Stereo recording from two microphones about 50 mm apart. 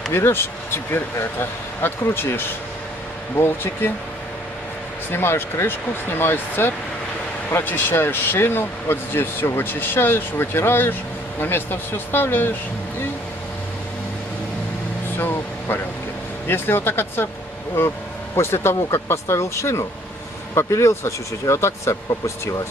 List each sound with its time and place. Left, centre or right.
0.1 s speech: left
5.1 s speech: left
15.1 s vehicle: left
16.4 s speech: left